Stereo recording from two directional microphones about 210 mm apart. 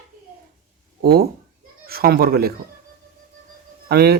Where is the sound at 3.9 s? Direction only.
50° right (ahead or behind).